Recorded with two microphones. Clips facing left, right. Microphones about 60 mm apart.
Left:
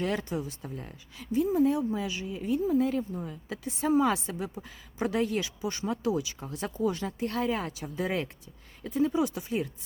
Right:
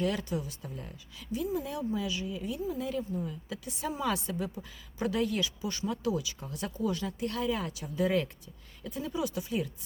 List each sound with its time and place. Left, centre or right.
0.0 s a woman's voice: left